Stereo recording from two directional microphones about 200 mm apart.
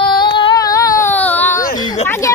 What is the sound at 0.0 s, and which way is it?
Child singing, 25° left (ahead or behind).